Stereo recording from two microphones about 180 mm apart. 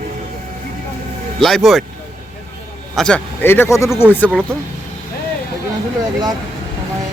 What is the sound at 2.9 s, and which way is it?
A man's voice, 5° left (ahead or behind).